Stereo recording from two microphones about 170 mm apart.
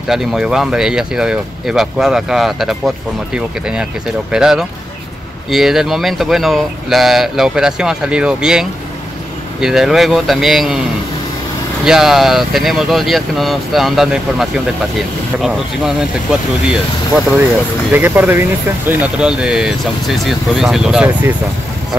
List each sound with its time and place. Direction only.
0.1 s speech: centre (ahead or behind)
11.8 s speech: 5° right (ahead or behind)